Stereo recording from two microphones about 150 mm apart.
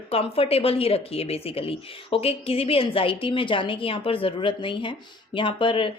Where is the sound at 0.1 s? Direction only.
40° left (ahead or behind).